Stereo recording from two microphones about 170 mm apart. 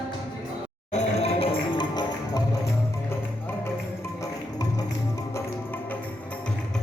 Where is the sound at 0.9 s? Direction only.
35° left (ahead or behind).